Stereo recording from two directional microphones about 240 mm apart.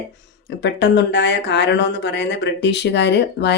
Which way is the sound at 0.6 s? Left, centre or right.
Left.